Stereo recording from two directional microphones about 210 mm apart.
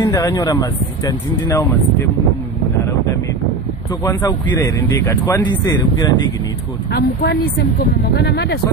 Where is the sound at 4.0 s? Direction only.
15° left (ahead or behind).